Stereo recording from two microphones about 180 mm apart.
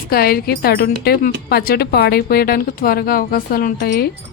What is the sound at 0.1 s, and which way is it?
Speech, 55° left (ahead or behind).